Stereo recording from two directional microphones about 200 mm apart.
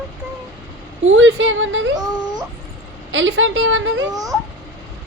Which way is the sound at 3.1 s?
70° right (ahead or behind).